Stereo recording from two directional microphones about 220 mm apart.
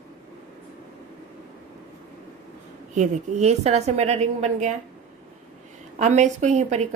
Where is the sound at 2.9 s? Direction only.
30° right (ahead or behind).